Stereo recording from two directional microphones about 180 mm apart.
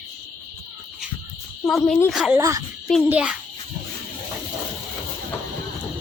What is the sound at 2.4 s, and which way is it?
Speech, 20° right (ahead or behind).